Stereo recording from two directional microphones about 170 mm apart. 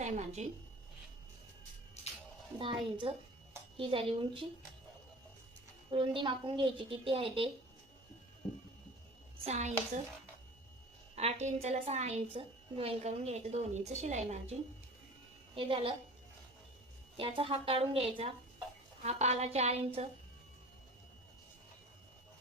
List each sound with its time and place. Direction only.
0.0 s speech: 45° right (ahead or behind)
2.6 s a woman's voice: 30° right (ahead or behind)
5.9 s a woman's voice: 30° right (ahead or behind)
9.4 s a woman's voice: 40° right (ahead or behind)
11.1 s a woman's voice: 40° right (ahead or behind)
15.5 s a woman's voice: 30° right (ahead or behind)
17.2 s a woman's voice: 30° right (ahead or behind)